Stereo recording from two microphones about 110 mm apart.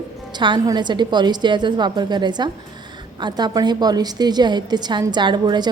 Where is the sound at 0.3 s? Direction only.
45° right (ahead or behind).